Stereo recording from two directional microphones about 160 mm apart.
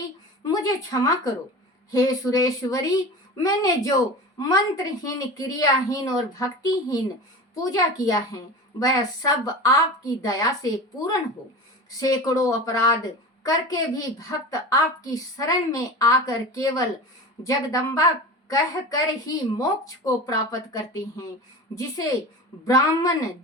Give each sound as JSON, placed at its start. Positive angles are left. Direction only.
{"t": 0.4, "sound": "a woman's voice", "side_deg": 25}